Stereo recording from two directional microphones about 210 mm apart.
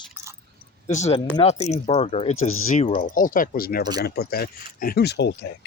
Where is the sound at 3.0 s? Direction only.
40° left (ahead or behind).